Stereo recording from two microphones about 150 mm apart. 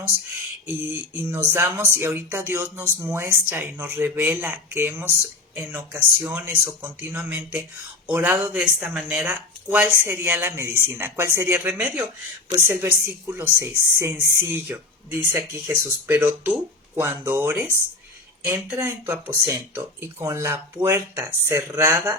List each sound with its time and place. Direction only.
0.9 s speech: 15° right (ahead or behind)